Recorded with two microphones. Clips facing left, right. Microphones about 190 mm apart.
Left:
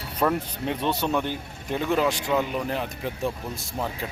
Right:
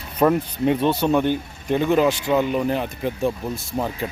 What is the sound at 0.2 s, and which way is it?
Speech, 10° right (ahead or behind).